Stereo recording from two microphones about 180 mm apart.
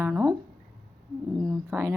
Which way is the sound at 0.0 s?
20° right (ahead or behind).